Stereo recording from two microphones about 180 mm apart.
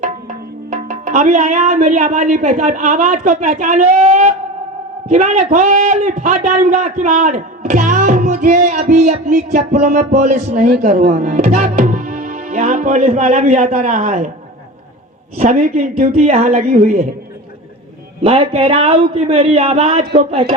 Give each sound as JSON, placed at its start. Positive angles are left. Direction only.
{"t": 0.0, "sound": "a man's voice", "side_deg": -40}
{"t": 15.4, "sound": "a man's voice", "side_deg": -45}
{"t": 18.2, "sound": "a man's voice", "side_deg": -30}